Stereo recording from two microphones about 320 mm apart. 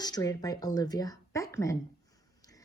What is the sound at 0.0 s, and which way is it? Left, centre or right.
Speech, centre.